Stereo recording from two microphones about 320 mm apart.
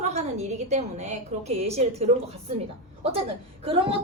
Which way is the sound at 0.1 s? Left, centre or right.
Centre.